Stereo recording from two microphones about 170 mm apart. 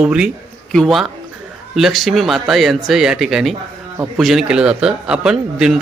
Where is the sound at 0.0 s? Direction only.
5° right (ahead or behind).